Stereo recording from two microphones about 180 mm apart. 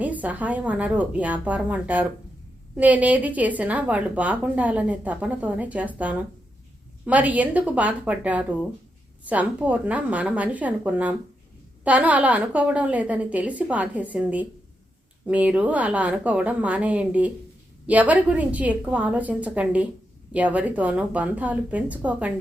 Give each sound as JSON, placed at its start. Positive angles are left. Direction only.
{"t": 0.0, "sound": "a woman's voice", "side_deg": -10}
{"t": 7.0, "sound": "a woman's voice", "side_deg": -10}